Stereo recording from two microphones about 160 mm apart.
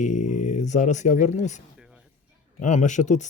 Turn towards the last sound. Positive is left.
turn(degrees=50)  # may be behind; listen again after turning